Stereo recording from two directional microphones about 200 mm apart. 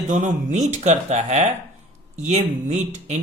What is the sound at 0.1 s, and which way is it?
Speech, 40° right (ahead or behind).